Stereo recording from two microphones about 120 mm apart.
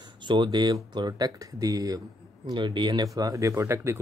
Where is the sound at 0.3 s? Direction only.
40° right (ahead or behind).